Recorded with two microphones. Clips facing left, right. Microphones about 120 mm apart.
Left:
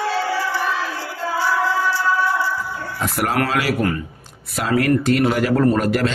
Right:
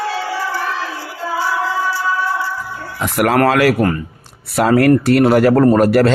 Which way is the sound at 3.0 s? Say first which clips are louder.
Right 7 dB; 70° right (ahead or behind).